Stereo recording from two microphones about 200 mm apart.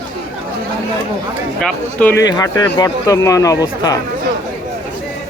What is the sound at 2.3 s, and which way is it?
Speech, 20° left (ahead or behind).